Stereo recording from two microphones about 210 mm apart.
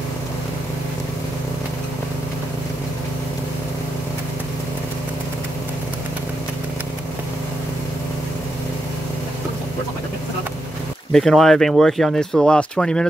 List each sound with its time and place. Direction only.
11.1 s speech: centre (ahead or behind)